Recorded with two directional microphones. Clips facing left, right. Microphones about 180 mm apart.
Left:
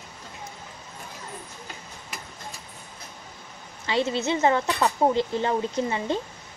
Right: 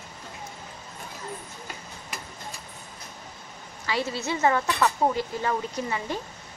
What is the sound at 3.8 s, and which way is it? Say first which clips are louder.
Speech: left 4 dB; 25° left (ahead or behind).